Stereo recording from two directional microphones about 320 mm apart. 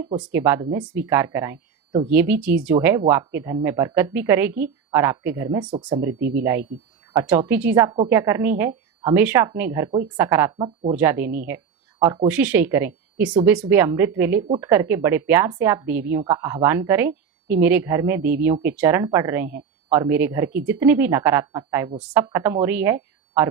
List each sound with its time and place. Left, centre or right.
0.0 s speech: centre
6.1 s speech: right
6.4 s speech: centre